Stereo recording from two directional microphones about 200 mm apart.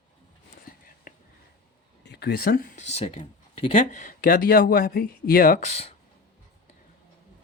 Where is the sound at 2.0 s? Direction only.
55° left (ahead or behind).